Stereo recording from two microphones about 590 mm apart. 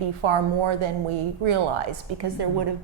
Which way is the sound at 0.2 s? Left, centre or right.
Right.